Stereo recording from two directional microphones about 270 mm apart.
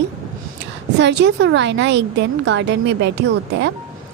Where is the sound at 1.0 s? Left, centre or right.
Right.